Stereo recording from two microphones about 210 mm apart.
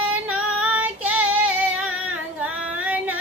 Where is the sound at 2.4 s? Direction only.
5° right (ahead or behind).